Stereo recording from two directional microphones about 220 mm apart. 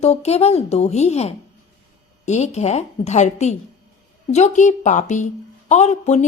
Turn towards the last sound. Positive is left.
turn(degrees=30)  # may be behind; listen again after turning